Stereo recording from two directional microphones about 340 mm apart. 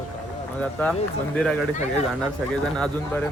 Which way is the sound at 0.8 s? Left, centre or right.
Centre.